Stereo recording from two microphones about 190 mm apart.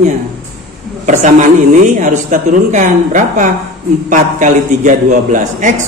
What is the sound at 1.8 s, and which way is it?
A man's voice, 40° right (ahead or behind).